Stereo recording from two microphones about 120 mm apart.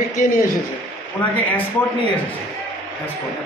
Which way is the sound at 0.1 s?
90° left.